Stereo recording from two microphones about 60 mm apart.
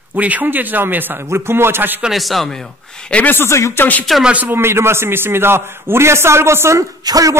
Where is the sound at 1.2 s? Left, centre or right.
Right.